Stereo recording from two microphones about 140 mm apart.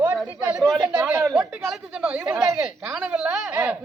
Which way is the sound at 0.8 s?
10° right (ahead or behind).